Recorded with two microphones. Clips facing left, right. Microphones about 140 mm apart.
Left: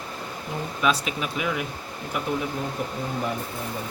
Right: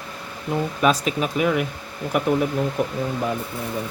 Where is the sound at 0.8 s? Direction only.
40° right (ahead or behind).